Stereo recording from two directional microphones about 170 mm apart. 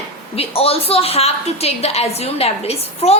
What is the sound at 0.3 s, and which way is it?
A woman's voice, 35° left (ahead or behind).